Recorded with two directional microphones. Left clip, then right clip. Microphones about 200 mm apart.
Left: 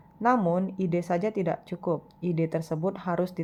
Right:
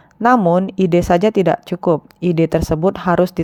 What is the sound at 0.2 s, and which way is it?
Speech, 45° right (ahead or behind).